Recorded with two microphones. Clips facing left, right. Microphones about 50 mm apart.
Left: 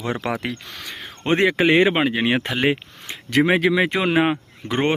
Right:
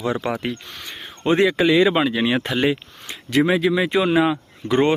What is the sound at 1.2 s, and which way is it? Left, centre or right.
Speech, left.